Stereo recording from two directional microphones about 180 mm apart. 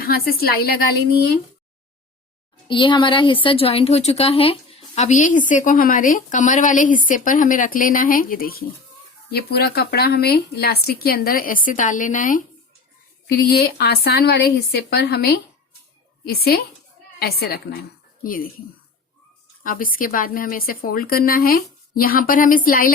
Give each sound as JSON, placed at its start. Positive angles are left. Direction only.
{"t": 0.0, "sound": "speech", "side_deg": 55}
{"t": 2.6, "sound": "a woman's voice", "side_deg": 25}
{"t": 13.2, "sound": "speech", "side_deg": 60}
{"t": 19.6, "sound": "a woman's voice", "side_deg": 50}